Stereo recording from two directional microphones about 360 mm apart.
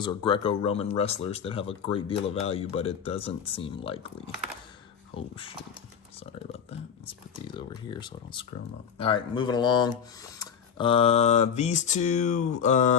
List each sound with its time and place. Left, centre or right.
0.0 s speech: centre
5.1 s speech: centre
7.9 s speech: centre
12.6 s a sound: centre